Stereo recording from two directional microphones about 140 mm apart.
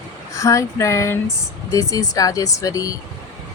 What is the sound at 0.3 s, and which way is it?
Speech, 20° left (ahead or behind).